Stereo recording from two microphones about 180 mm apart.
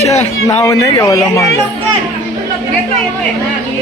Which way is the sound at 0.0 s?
35° left (ahead or behind).